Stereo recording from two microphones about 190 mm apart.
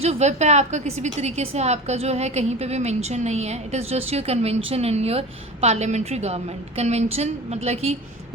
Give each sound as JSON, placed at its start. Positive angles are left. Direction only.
{"t": 0.0, "sound": "a woman's voice", "side_deg": -35}